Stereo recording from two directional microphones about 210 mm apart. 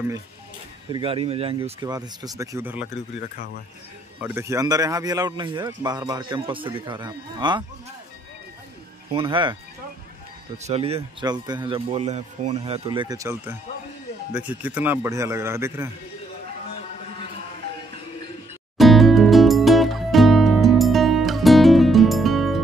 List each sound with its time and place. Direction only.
0.9 s speech: 25° right (ahead or behind); by 2.9 s 10° right (ahead or behind)
4.2 s speech: 10° right (ahead or behind)
9.1 s speech: 25° right (ahead or behind)
10.6 s speech: 30° right (ahead or behind); by 15.9 s 10° right (ahead or behind)
18.8 s music: centre (ahead or behind)